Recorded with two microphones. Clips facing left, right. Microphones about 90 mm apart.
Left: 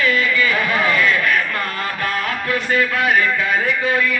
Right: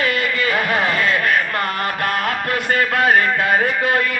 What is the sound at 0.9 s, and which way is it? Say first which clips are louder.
A man's voice: left 1 dB; 35° right (ahead or behind).